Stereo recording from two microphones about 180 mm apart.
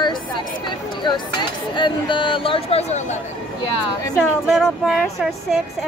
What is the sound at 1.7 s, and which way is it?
Speech, 25° left (ahead or behind).